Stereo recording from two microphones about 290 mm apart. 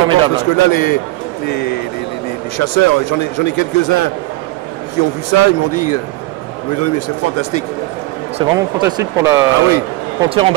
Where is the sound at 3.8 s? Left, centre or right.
Left.